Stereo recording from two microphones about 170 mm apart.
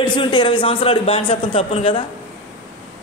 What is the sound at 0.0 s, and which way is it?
A man's voice, 30° left (ahead or behind).